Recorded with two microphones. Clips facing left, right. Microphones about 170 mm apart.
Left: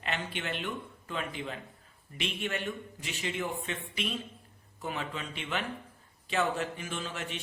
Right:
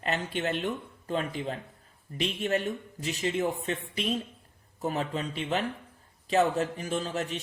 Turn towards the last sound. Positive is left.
turn(degrees=-40)  # may be behind; listen again after turning